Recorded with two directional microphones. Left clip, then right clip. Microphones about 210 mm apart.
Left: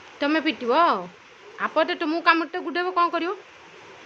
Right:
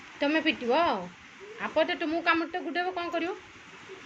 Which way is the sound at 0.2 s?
25° left (ahead or behind).